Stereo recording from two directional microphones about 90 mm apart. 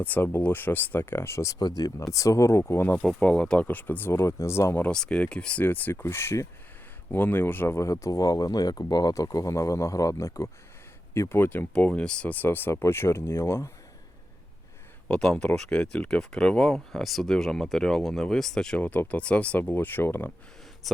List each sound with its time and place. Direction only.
0.0 s speech: 20° left (ahead or behind)
1.5 s speech: 45° left (ahead or behind); by 3.0 s 25° left (ahead or behind)
3.0 s speech: 10° left (ahead or behind); by 4.8 s 30° left (ahead or behind)
4.8 s speech: 10° left (ahead or behind)
11.7 s speech: 10° left (ahead or behind); by 13.7 s 30° left (ahead or behind)
15.0 s speech: 10° left (ahead or behind)
18.8 s speech: 15° left (ahead or behind)
20.8 s speech: centre (ahead or behind)